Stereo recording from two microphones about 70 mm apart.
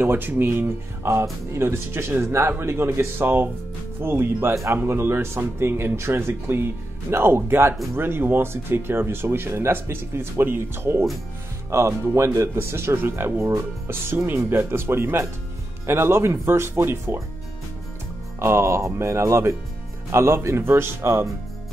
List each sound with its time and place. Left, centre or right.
0.0 s speech: right
18.4 s speech: right